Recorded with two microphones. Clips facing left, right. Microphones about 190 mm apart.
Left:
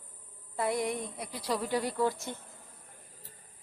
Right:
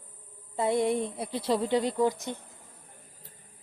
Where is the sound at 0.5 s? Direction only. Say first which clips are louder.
Right 5 dB; 25° right (ahead or behind).